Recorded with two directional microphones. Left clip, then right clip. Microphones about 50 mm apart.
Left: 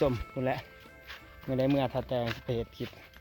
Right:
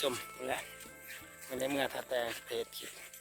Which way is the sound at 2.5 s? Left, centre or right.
Centre.